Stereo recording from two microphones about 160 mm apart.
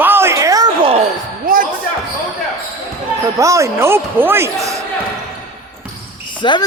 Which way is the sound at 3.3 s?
20° right (ahead or behind).